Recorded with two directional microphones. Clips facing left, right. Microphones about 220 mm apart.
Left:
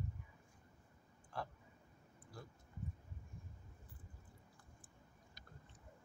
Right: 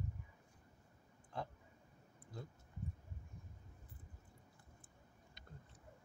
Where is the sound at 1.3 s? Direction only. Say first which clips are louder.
Right 1 dB; 20° right (ahead or behind).